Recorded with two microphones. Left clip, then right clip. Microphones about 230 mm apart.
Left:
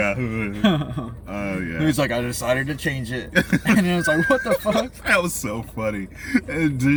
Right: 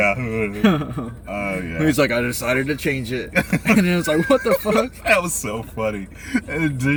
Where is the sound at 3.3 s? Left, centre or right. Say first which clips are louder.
Right 1 dB; left.